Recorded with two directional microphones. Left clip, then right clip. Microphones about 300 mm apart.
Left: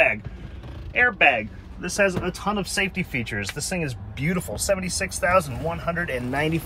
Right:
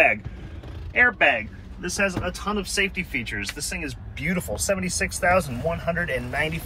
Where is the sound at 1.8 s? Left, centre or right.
Centre.